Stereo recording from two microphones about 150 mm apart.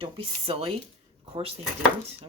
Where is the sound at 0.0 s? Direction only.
40° right (ahead or behind).